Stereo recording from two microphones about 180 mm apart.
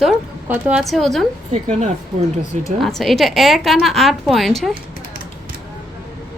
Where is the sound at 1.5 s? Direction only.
40° right (ahead or behind).